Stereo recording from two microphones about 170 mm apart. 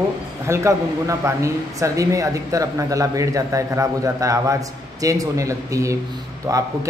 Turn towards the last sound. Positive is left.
turn(degrees=-20)  # may be behind; listen again after turning